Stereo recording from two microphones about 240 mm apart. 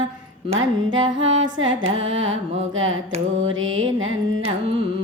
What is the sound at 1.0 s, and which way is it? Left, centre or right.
Carnatic music, right.